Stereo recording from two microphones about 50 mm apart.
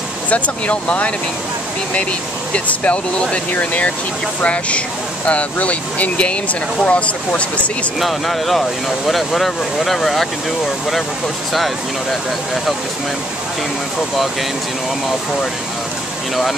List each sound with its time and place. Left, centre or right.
0.3 s speech: left
2.5 s speech: left
8.0 s speech: centre
11.5 s speech: centre